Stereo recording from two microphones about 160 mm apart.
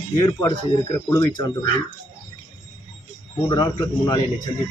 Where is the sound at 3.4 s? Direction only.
25° left (ahead or behind).